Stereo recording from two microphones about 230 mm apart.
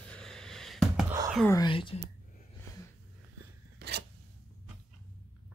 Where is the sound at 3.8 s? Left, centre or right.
Right.